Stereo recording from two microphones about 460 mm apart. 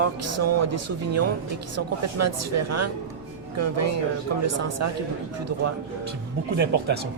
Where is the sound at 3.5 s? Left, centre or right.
Right.